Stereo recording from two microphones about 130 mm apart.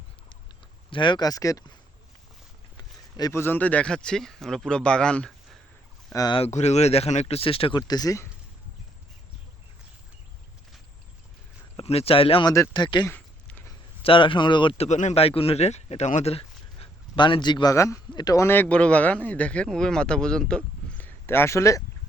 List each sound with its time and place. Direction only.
0.9 s speech: 40° left (ahead or behind)
2.7 s a sound: 30° left (ahead or behind)
3.3 s speech: 15° left (ahead or behind)
6.5 s speech: 60° left (ahead or behind); by 7.8 s 45° left (ahead or behind)
7.8 s speech: 30° left (ahead or behind)
11.8 s speech: 50° left (ahead or behind)
12.5 s speech: 30° left (ahead or behind)
14.8 s a man's voice: 65° left (ahead or behind)
15.2 s speech: 50° left (ahead or behind); by 18.4 s 30° left (ahead or behind)
18.4 s speech: 15° left (ahead or behind)